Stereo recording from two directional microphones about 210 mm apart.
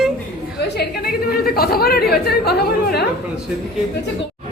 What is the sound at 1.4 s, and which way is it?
Speech, 45° left (ahead or behind).